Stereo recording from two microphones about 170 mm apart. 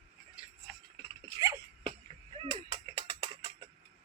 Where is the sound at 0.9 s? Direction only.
25° right (ahead or behind).